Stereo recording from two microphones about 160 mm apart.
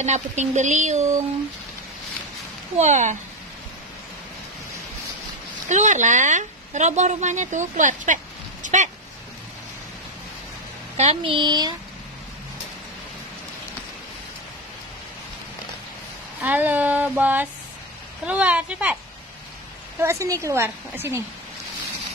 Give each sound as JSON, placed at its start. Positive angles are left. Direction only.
{"t": 0.0, "sound": "a woman's voice", "side_deg": -45}
{"t": 2.8, "sound": "a woman's voice", "side_deg": -45}
{"t": 5.7, "sound": "a woman's voice", "side_deg": -50}
{"t": 11.0, "sound": "a woman's voice", "side_deg": -35}
{"t": 16.3, "sound": "a woman's voice", "side_deg": -10}
{"t": 20.0, "sound": "a woman's voice", "side_deg": -20}